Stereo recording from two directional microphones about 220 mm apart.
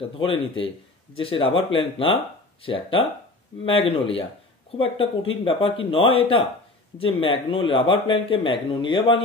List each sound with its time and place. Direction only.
0.2 s speech: 25° left (ahead or behind)